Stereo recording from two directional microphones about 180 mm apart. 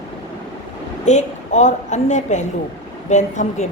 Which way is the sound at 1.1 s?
40° left (ahead or behind).